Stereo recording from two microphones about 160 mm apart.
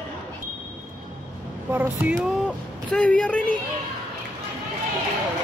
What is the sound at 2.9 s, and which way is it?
Speech, 5° left (ahead or behind).